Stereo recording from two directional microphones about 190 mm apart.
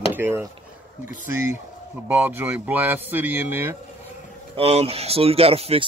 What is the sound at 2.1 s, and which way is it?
Speech, 10° right (ahead or behind).